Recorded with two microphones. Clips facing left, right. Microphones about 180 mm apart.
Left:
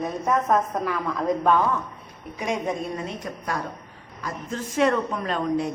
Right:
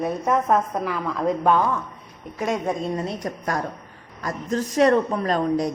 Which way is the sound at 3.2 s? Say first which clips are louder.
Right 3 dB; 45° right (ahead or behind).